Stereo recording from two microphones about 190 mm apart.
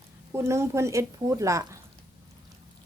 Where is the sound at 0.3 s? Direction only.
15° right (ahead or behind).